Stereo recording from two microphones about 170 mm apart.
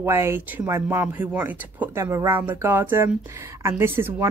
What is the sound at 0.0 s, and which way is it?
A woman's voice, 15° right (ahead or behind).